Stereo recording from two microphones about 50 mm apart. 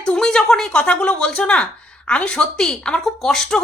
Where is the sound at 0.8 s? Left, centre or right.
Left.